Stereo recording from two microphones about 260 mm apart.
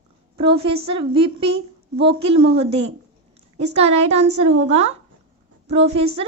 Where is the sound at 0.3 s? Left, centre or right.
Right.